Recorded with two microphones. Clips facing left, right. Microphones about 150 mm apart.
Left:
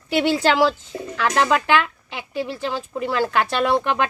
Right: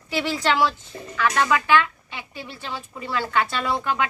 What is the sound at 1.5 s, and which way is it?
Speech, 65° left (ahead or behind).